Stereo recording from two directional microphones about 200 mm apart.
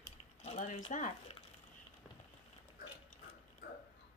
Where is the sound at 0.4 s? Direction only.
35° left (ahead or behind).